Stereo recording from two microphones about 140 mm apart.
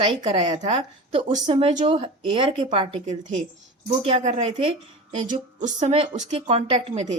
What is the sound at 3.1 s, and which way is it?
Speech, 60° right (ahead or behind).